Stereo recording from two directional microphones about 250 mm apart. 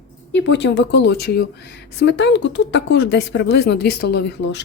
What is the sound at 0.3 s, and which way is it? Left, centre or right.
A woman's voice, left.